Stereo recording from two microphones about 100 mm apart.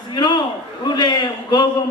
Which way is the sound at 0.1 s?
50° left (ahead or behind).